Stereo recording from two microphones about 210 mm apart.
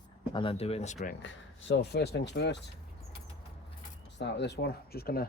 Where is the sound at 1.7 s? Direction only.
50° left (ahead or behind).